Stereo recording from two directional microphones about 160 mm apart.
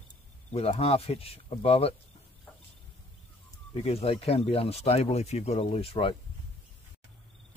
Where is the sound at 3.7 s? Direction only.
40° left (ahead or behind).